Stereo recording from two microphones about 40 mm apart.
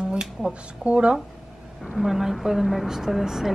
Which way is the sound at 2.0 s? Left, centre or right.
Centre.